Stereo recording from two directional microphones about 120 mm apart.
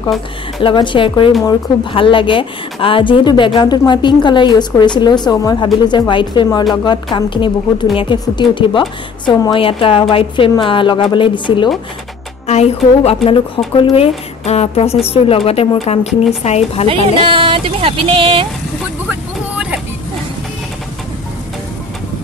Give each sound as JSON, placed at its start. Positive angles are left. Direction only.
{"t": 0.6, "sound": "a woman's voice", "side_deg": 45}
{"t": 12.4, "sound": "a woman's voice", "side_deg": 65}
{"t": 16.8, "sound": "speech", "side_deg": -50}
{"t": 19.0, "sound": "vehicle", "side_deg": -5}